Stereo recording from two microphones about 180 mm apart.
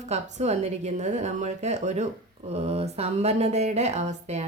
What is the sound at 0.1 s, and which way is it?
A woman's voice, 40° right (ahead or behind).